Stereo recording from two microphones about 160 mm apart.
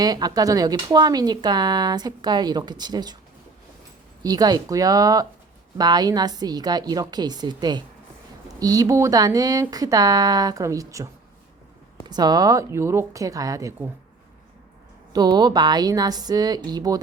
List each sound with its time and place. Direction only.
0.0 s speech: 25° right (ahead or behind)
4.2 s speech: 25° right (ahead or behind)
15.1 s speech: 25° right (ahead or behind)